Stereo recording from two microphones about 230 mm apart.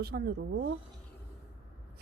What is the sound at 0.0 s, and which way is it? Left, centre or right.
Speech, right.